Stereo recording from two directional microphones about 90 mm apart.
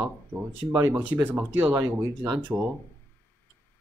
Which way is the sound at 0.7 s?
25° right (ahead or behind).